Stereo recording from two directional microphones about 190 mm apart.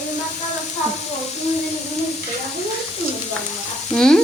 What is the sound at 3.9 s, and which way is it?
Stir, 5° left (ahead or behind).